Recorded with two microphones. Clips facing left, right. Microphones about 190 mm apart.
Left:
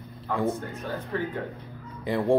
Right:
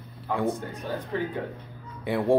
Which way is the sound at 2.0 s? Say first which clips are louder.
Even; 5° right (ahead or behind).